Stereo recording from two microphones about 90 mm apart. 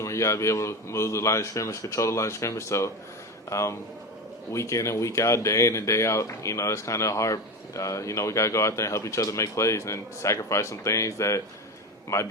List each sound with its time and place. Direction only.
0.0 s speech: 35° left (ahead or behind)